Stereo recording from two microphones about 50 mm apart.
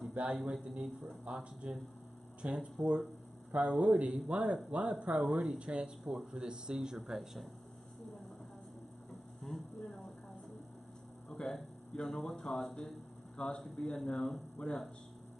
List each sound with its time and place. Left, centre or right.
0.2 s speech: right
0.5 s speech: centre
6.1 s speech: centre
7.0 s speech: centre
9.4 s a sound: centre
11.2 s speech: centre